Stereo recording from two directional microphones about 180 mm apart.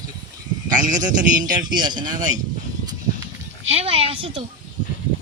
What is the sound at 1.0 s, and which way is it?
Speech, 25° right (ahead or behind).